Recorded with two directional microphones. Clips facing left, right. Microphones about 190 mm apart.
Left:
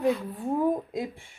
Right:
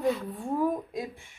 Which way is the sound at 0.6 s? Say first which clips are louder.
Left 2 dB; 25° left (ahead or behind).